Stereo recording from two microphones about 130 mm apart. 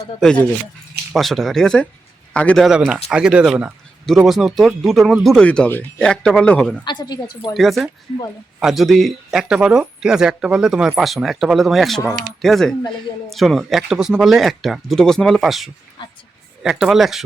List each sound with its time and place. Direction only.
0.2 s speech: 5° left (ahead or behind)
2.6 s speech: 5° right (ahead or behind)
6.8 s speech: 35° left (ahead or behind)
7.5 s speech: centre (ahead or behind)